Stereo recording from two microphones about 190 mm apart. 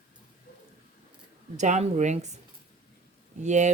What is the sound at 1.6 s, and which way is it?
Speech, 40° right (ahead or behind).